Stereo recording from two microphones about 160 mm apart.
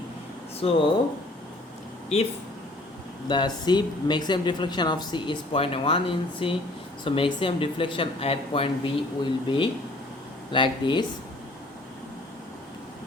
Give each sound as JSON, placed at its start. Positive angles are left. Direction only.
{"t": 0.6, "sound": "speech", "side_deg": 35}
{"t": 3.2, "sound": "speech", "side_deg": 30}